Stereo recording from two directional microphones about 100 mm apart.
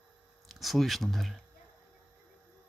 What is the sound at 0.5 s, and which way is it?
Speech, centre (ahead or behind).